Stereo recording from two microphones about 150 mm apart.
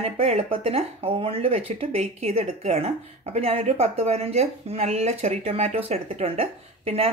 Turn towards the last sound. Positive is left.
turn(degrees=-45)  # may be behind; listen again after turning